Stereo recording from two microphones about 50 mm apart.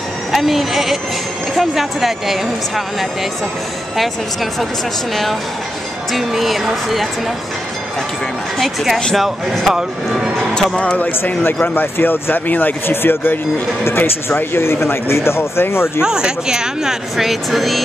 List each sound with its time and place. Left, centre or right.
0.3 s speech: centre
8.5 s speech: centre
9.8 s speech: centre
10.5 s music: centre
10.8 s speech: left
11.1 s speech: left
16.0 s speech: centre